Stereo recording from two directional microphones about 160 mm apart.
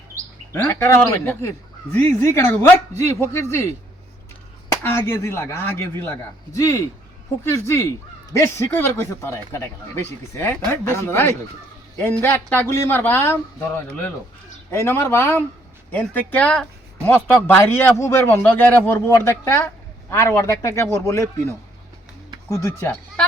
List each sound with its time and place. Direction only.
0.5 s speech: 15° left (ahead or behind)
4.7 s a man's voice: 15° left (ahead or behind)
14.7 s speech: 15° left (ahead or behind)